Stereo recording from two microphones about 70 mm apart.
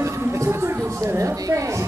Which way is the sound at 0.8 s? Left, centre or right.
Right.